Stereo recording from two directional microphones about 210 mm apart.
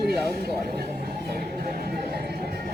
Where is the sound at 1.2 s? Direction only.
45° right (ahead or behind).